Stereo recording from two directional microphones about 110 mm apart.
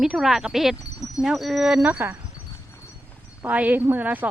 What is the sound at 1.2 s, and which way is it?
Wind chime, centre (ahead or behind).